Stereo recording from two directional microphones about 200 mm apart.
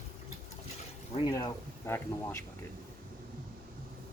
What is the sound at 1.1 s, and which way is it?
Speech, 20° left (ahead or behind).